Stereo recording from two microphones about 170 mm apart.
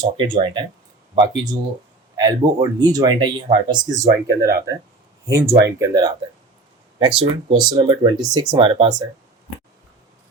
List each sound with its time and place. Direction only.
0.0 s speech: 30° right (ahead or behind)
7.2 s speech: 25° right (ahead or behind)